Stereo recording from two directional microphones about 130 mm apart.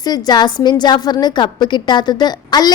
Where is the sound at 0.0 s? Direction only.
30° left (ahead or behind).